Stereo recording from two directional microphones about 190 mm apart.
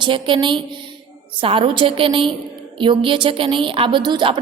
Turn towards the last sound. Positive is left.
turn(degrees=-25)  # may be behind; listen again after turning